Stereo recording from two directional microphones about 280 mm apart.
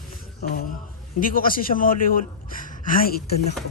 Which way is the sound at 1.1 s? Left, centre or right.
Left.